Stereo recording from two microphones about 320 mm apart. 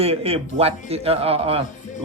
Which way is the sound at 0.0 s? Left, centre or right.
Centre.